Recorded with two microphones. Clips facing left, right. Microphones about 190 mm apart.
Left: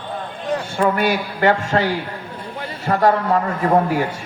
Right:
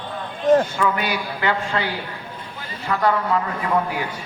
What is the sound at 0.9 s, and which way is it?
A man's voice, 45° left (ahead or behind).